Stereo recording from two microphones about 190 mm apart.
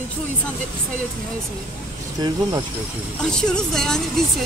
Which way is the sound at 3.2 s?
5° left (ahead or behind).